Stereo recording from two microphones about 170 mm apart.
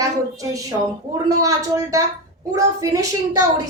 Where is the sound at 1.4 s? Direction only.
20° right (ahead or behind).